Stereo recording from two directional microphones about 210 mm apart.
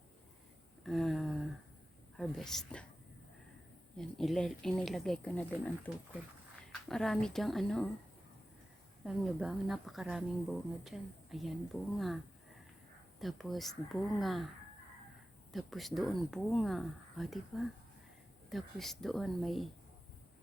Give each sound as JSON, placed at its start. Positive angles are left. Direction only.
{"t": 0.9, "sound": "a sound", "side_deg": 0}
{"t": 2.1, "sound": "a woman's voice", "side_deg": 0}
{"t": 3.9, "sound": "speech", "side_deg": 0}
{"t": 6.7, "sound": "speech", "side_deg": 0}
{"t": 9.0, "sound": "speech", "side_deg": 0}
{"t": 15.5, "sound": "speech", "side_deg": 0}